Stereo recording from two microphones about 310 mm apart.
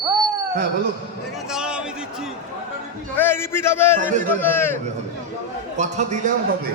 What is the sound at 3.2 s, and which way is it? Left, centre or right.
Speech, centre.